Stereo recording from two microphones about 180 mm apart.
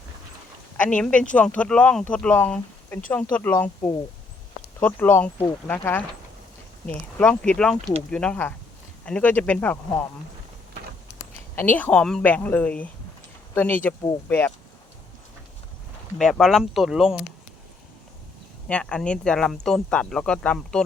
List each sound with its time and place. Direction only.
0.8 s speech: 5° left (ahead or behind)
11.2 s speech: 10° left (ahead or behind)
16.1 s speech: 5° left (ahead or behind)
18.7 s speech: 5° left (ahead or behind)